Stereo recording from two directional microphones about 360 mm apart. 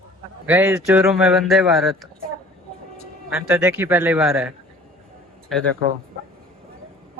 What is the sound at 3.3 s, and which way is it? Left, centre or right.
A man's voice, centre.